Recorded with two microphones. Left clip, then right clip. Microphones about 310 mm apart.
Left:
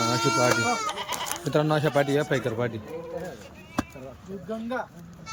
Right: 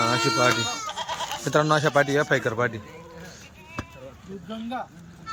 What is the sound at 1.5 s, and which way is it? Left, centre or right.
A man's voice, centre.